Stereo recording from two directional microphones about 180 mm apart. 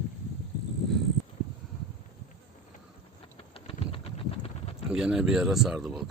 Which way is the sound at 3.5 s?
30° left (ahead or behind).